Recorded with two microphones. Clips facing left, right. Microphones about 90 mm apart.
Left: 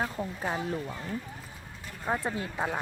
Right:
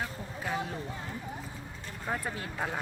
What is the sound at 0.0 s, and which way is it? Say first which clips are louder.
Speech: left 5 dB; 35° left (ahead or behind).